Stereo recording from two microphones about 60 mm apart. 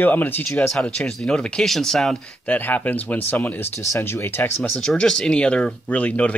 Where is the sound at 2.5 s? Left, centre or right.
Left.